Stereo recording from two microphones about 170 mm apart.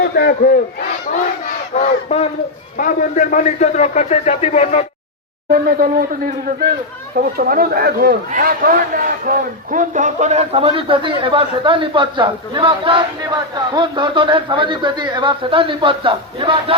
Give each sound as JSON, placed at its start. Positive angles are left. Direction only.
{"t": 0.0, "sound": "speech", "side_deg": 65}
{"t": 1.7, "sound": "battle cry", "side_deg": 40}
{"t": 2.7, "sound": "a man's voice", "side_deg": 50}
{"t": 5.5, "sound": "speech", "side_deg": -60}
{"t": 7.2, "sound": "a man's voice", "side_deg": -60}